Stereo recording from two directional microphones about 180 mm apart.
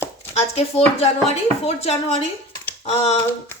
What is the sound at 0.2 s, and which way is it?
Speech, 35° left (ahead or behind).